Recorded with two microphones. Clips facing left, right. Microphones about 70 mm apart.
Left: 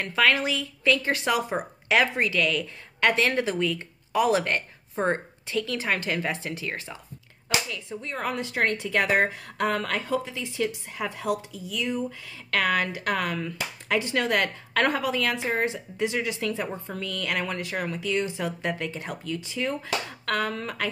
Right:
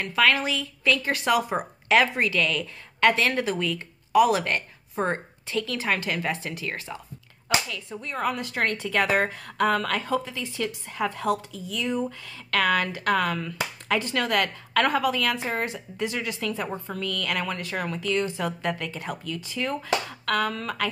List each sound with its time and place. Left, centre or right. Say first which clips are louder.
0.0 s speech: right 1 dB; left
7.4 s a sound: right 2 dB; left
8.2 s speech: even; left